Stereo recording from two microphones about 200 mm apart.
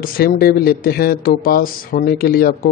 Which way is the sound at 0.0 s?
50° left (ahead or behind).